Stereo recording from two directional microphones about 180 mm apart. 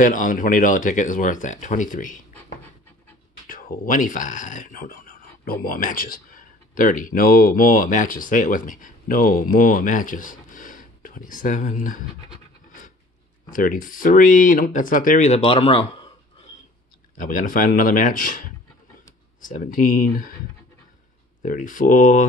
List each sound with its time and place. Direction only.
0.0 s speech: 45° left (ahead or behind)
3.4 s speech: 50° left (ahead or behind)
13.5 s speech: 50° left (ahead or behind); by 16.1 s 30° left (ahead or behind)
17.2 s speech: 50° left (ahead or behind)
19.4 s speech: 50° left (ahead or behind)
21.4 s speech: 45° left (ahead or behind)